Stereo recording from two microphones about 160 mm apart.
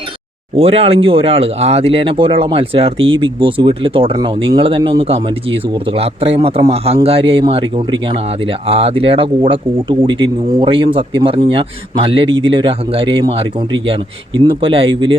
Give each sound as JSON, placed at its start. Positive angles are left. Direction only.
{"t": 0.5, "sound": "speech", "side_deg": -35}